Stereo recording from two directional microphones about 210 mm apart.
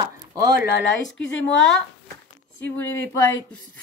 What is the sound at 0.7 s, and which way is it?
Speech, 65° left (ahead or behind).